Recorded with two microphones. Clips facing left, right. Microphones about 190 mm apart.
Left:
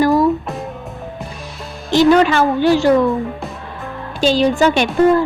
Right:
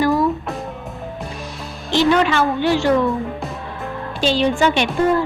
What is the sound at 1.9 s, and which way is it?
A woman's voice, 45° left (ahead or behind).